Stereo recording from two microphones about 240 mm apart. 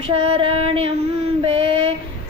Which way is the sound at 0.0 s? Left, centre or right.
Right.